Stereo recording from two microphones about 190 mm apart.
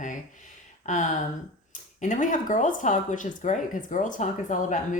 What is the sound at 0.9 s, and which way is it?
Speech, 40° left (ahead or behind).